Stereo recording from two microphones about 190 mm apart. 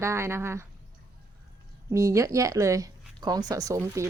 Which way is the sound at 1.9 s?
15° right (ahead or behind).